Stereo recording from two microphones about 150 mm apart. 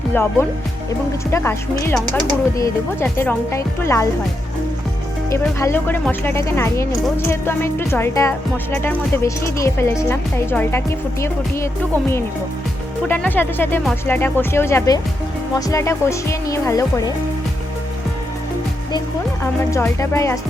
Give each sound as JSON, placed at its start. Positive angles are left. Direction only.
{"t": 0.1, "sound": "speech", "side_deg": 15}
{"t": 5.3, "sound": "speech", "side_deg": 20}
{"t": 13.1, "sound": "speech", "side_deg": 10}
{"t": 19.7, "sound": "speech", "side_deg": 20}